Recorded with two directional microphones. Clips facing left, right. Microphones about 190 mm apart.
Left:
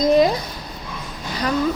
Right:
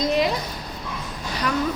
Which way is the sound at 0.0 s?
45° left (ahead or behind).